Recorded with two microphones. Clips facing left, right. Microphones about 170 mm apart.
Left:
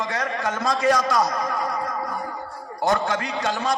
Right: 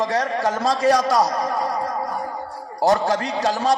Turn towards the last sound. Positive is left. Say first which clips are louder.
# right 4 dB
turn(degrees=-35)  # may be behind; listen again after turning